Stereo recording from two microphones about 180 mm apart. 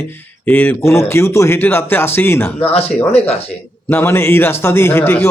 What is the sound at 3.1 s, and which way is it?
Speech, 35° left (ahead or behind).